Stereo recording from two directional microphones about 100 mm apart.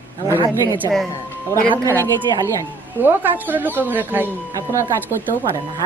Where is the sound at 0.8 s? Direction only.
40° right (ahead or behind).